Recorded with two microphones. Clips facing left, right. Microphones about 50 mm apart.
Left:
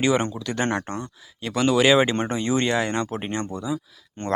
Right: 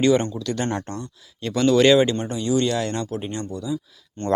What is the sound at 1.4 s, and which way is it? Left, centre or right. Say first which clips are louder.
Speech: right 3 dB; centre.